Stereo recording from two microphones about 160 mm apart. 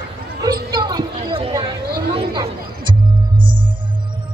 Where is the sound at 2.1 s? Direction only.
30° right (ahead or behind).